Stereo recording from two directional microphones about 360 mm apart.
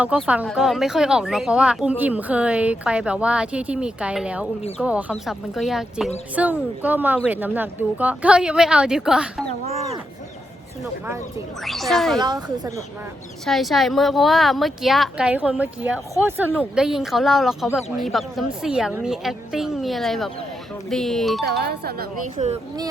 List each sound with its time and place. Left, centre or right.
0.0 s speech: centre
11.0 s speech: centre
12.2 s speech: centre
13.4 s speech: centre
21.4 s speech: right